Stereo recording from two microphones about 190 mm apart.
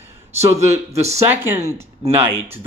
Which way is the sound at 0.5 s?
15° right (ahead or behind).